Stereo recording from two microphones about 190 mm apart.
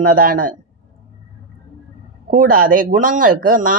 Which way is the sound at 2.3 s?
45° right (ahead or behind).